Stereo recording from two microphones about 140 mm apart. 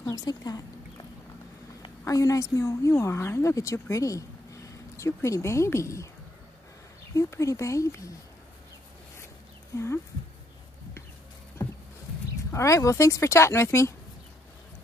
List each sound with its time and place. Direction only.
0.0 s a sound: 25° left (ahead or behind)
1.8 s speech: 25° left (ahead or behind)
7.2 s speech: 20° left (ahead or behind)
9.7 s speech: 20° left (ahead or behind)
12.5 s speech: 20° left (ahead or behind)